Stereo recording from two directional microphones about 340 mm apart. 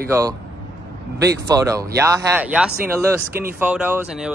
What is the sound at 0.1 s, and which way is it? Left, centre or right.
Speech, centre.